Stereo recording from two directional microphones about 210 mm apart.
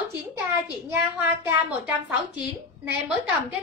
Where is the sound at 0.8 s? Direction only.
10° right (ahead or behind).